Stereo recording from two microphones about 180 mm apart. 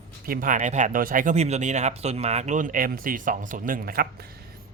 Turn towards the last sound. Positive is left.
turn(degrees=-55)  # may be behind; listen again after turning